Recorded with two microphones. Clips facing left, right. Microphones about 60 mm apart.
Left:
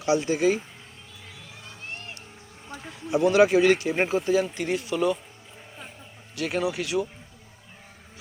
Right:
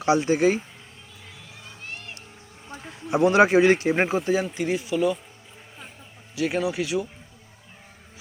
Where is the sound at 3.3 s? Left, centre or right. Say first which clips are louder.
Right 1 dB; right.